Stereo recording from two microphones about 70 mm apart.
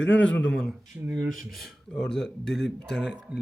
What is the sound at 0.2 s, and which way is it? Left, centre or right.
Speech, centre.